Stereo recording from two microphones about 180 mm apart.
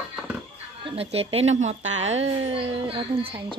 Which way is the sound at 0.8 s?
30° right (ahead or behind).